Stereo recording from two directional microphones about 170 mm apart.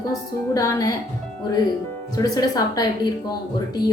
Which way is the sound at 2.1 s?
20° left (ahead or behind).